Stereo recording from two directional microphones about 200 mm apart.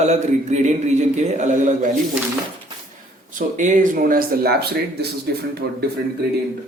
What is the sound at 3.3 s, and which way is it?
Speech, 40° right (ahead or behind).